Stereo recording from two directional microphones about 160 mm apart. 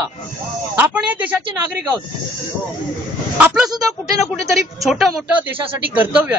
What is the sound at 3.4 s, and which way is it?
Speech, 5° right (ahead or behind).